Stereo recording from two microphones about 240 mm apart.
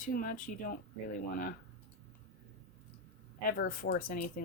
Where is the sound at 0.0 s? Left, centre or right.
Left.